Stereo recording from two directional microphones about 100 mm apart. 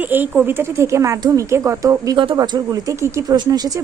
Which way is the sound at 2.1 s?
55° right (ahead or behind).